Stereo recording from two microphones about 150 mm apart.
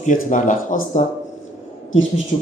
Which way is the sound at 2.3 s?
65° left (ahead or behind).